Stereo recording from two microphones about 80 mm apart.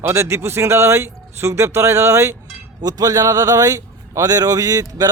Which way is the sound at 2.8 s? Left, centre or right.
Right.